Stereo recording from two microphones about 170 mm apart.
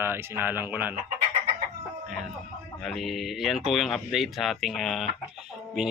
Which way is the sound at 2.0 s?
Centre (ahead or behind).